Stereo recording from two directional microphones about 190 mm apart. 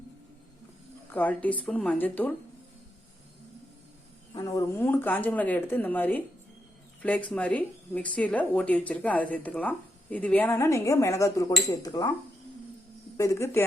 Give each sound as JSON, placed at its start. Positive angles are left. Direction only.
{"t": 1.1, "sound": "speech", "side_deg": 10}
{"t": 4.4, "sound": "speech", "side_deg": 20}
{"t": 13.1, "sound": "speech", "side_deg": 15}